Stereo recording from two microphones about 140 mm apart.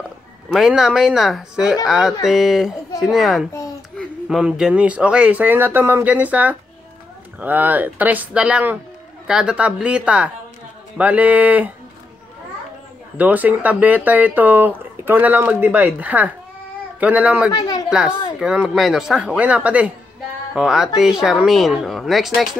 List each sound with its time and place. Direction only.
0.5 s speech: 5° right (ahead or behind)
13.2 s speech: 10° right (ahead or behind)
17.5 s speech: 30° left (ahead or behind)
17.8 s speech: 5° right (ahead or behind)